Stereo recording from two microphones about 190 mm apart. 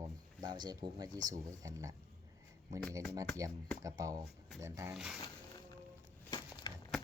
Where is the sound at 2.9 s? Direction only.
15° right (ahead or behind).